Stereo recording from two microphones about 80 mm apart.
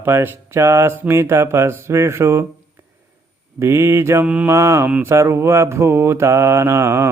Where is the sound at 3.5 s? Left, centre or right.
Right.